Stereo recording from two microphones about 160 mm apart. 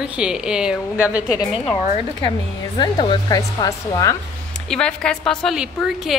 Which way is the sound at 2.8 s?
25° left (ahead or behind).